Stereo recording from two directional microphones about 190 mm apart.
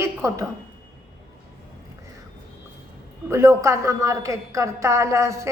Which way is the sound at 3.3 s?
15° right (ahead or behind).